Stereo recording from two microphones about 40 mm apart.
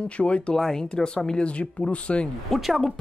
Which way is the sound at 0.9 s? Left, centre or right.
Centre.